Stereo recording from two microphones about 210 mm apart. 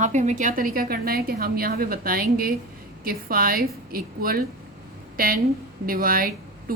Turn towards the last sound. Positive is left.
turn(degrees=-45)  # may be behind; listen again after turning